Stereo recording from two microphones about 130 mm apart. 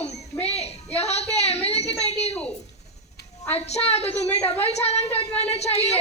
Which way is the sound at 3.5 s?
55° left (ahead or behind).